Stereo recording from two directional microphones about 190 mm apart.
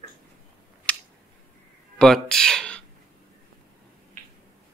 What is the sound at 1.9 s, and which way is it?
Speech, 5° left (ahead or behind).